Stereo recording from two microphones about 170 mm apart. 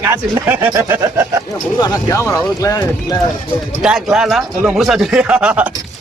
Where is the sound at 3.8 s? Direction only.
5° right (ahead or behind).